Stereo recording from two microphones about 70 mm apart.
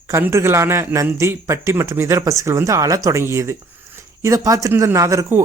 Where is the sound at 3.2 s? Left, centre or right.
Right.